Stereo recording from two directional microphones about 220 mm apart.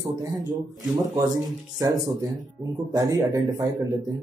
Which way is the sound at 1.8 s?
15° right (ahead or behind).